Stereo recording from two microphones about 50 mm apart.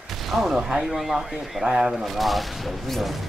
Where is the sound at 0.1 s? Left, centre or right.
Centre.